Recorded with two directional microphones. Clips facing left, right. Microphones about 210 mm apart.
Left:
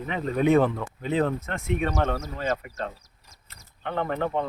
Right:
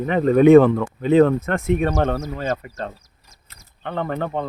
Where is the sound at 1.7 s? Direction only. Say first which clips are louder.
Right 5 dB; 45° right (ahead or behind).